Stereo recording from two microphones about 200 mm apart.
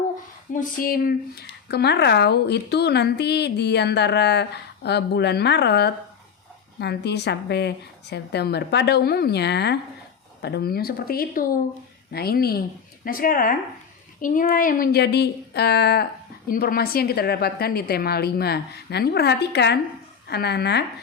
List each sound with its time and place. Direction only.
0.5 s a woman's voice: 45° left (ahead or behind)